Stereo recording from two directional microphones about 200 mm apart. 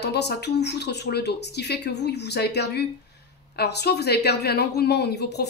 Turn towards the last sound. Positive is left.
turn(degrees=55)  # may be behind; listen again after turning